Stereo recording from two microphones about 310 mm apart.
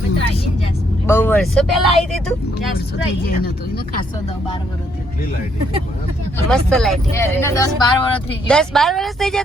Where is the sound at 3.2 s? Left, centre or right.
Left.